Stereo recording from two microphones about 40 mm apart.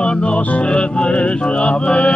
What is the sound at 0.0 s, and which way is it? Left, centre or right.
Music, left.